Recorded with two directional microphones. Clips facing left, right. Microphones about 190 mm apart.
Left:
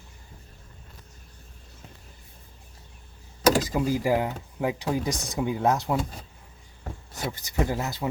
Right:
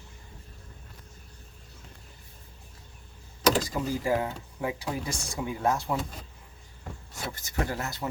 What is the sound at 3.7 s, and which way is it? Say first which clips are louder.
Speech: left 4 dB; 15° left (ahead or behind).